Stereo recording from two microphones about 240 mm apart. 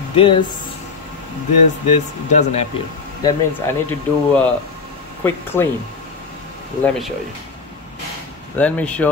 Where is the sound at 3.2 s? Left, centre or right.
Centre.